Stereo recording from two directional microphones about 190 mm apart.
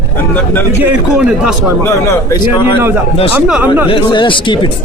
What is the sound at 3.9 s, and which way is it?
Speech, 25° left (ahead or behind).